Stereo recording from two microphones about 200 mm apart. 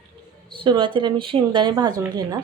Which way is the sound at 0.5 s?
25° right (ahead or behind).